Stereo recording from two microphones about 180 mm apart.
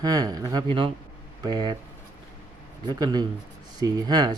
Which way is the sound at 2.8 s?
20° right (ahead or behind).